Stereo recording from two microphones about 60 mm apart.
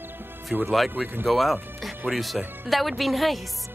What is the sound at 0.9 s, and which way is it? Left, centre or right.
Speech, right.